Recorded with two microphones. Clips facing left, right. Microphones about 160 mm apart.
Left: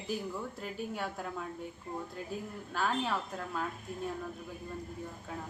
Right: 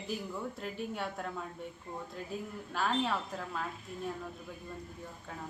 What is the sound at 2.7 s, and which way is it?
Speech, centre (ahead or behind).